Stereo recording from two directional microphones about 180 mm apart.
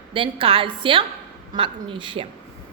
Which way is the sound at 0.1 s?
30° right (ahead or behind).